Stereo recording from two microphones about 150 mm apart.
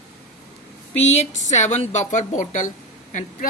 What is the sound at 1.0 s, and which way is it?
A woman's voice, 50° left (ahead or behind).